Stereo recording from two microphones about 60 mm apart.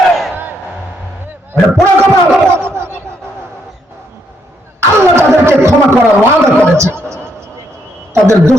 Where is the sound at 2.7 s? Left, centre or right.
Right.